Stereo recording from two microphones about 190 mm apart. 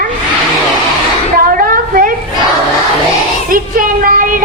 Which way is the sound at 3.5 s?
45° right (ahead or behind).